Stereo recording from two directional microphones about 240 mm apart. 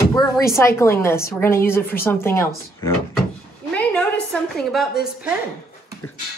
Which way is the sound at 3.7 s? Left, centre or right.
Centre.